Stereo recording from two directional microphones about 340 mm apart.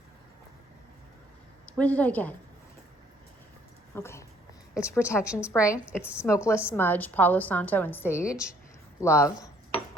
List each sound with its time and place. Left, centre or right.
1.6 s a woman's voice: centre
3.9 s a sound: centre
4.8 s a woman's voice: centre
5.8 s a woman's voice: centre
6.2 s a woman's voice: centre
9.0 s a sound: centre